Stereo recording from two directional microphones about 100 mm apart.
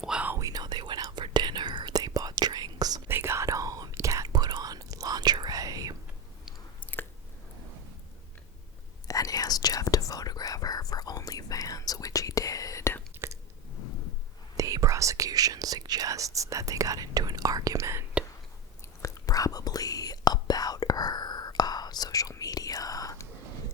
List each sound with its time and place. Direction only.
0.0 s whispering: 10° right (ahead or behind)
0.3 s whispering: 35° right (ahead or behind)
3.1 s whispering: 25° right (ahead or behind)
9.0 s whispering: 35° left (ahead or behind)
13.2 s chewing: 25° right (ahead or behind)
14.5 s whispering: 35° right (ahead or behind)
19.0 s whispering: 35° left (ahead or behind)